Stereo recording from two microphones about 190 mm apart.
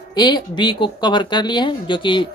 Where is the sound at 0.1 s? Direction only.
25° left (ahead or behind).